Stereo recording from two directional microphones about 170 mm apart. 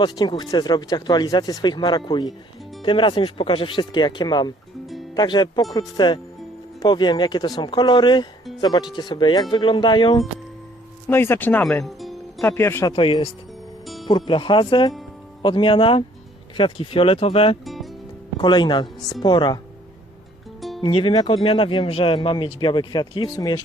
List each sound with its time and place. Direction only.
0.0 s speech: 25° left (ahead or behind)
11.1 s speech: 15° left (ahead or behind)
12.9 s speech: 30° left (ahead or behind)
13.8 s music: centre (ahead or behind)
14.1 s speech: 30° left (ahead or behind)
17.7 s music: centre (ahead or behind)
18.3 s speech: 25° left (ahead or behind)
20.6 s music: centre (ahead or behind)
20.8 s speech: 30° left (ahead or behind)